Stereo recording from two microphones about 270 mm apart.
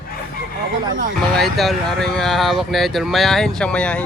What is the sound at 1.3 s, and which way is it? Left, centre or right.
Speech, centre.